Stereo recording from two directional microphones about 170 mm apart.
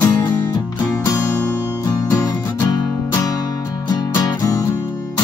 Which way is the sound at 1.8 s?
20° left (ahead or behind).